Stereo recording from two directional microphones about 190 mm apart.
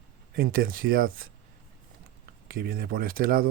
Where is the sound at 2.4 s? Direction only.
50° right (ahead or behind).